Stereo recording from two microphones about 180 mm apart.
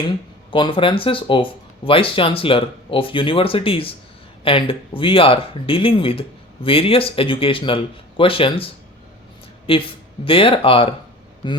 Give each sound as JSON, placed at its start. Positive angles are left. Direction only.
{"t": 0.5, "sound": "speech", "side_deg": 30}